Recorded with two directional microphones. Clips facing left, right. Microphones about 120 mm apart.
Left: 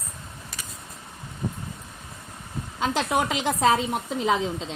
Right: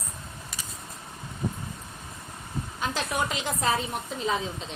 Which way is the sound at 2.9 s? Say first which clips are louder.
Left 5 dB; 80° left.